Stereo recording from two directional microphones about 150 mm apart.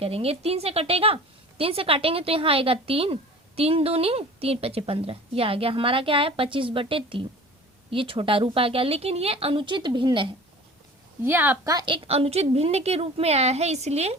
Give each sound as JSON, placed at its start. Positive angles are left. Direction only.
{"t": 0.0, "sound": "a woman's voice", "side_deg": -40}
{"t": 11.2, "sound": "a woman's voice", "side_deg": -15}
{"t": 11.7, "sound": "a woman's voice", "side_deg": -30}